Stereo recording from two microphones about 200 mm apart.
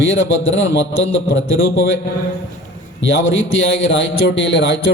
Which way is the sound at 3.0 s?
65° left (ahead or behind).